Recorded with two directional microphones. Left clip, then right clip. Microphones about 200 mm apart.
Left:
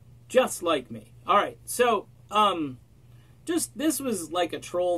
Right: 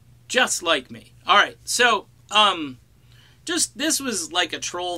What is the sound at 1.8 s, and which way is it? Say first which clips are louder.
Speech: right 4 dB; 15° right (ahead or behind).